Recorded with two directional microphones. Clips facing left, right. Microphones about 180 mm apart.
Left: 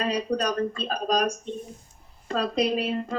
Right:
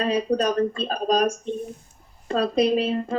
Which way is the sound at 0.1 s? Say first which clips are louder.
Right 4 dB; 25° right (ahead or behind).